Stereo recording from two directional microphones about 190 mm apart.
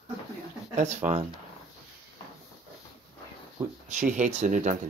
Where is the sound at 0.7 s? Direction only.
40° right (ahead or behind).